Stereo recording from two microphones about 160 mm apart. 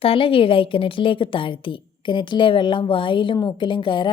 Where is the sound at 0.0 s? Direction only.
35° left (ahead or behind).